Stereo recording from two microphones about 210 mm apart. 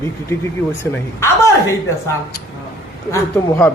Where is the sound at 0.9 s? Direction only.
10° left (ahead or behind).